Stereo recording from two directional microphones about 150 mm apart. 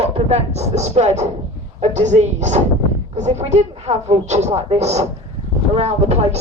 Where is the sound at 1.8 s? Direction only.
50° right (ahead or behind).